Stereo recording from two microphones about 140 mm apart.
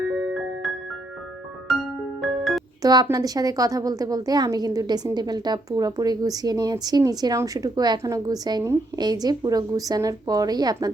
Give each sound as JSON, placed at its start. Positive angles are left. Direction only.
{"t": 2.2, "sound": "music", "side_deg": 0}
{"t": 2.8, "sound": "a woman's voice", "side_deg": -25}